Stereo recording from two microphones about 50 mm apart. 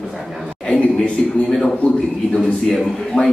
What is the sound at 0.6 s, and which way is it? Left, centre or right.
Speech, left.